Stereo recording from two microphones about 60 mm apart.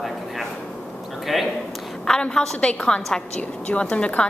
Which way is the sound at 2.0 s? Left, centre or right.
Centre.